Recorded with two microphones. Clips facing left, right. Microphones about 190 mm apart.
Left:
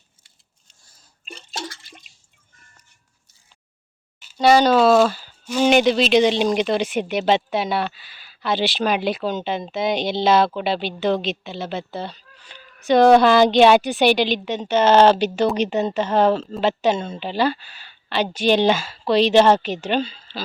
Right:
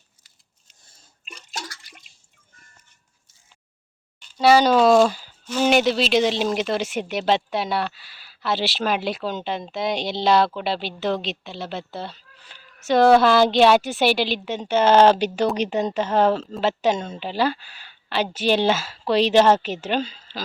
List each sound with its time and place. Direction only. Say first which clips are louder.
1.2 s drip: left 4 dB; 30° left (ahead or behind)
4.4 s speech: left 1 dB; 5° right (ahead or behind)
5.6 s speech: left 3 dB; 5° right (ahead or behind)